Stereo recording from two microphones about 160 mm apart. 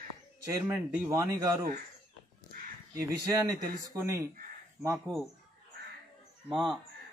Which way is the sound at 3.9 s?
20° right (ahead or behind).